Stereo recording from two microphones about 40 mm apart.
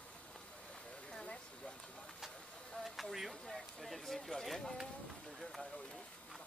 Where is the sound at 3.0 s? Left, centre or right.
Centre.